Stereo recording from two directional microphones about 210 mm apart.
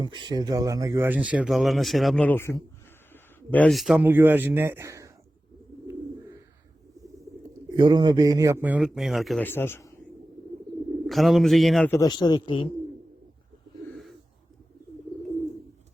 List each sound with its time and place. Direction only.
0.0 s speech: 20° right (ahead or behind)
7.7 s speech: 20° right (ahead or behind); by 9.5 s centre (ahead or behind)
9.5 s speech: 10° left (ahead or behind)
11.0 s a man's voice: centre (ahead or behind)
11.9 s a man's voice: 20° left (ahead or behind)